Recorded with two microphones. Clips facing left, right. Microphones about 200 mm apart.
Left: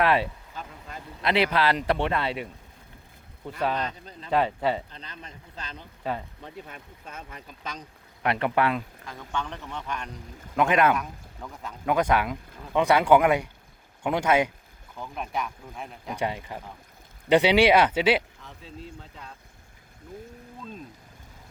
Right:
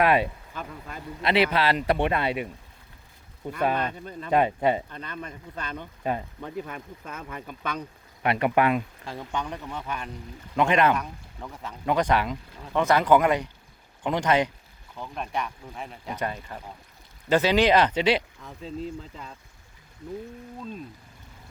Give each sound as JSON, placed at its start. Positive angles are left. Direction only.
{"t": 0.0, "sound": "a man's voice", "side_deg": -15}
{"t": 1.2, "sound": "speech", "side_deg": 0}
{"t": 2.0, "sound": "a man's voice", "side_deg": -15}
{"t": 3.8, "sound": "speech", "side_deg": -55}
{"t": 4.3, "sound": "a man's voice", "side_deg": -15}
{"t": 4.9, "sound": "speech", "side_deg": -55}
{"t": 6.0, "sound": "speech", "side_deg": -15}
{"t": 6.4, "sound": "speech", "side_deg": -55}
{"t": 8.2, "sound": "a man's voice", "side_deg": -10}
{"t": 16.1, "sound": "speech", "side_deg": 15}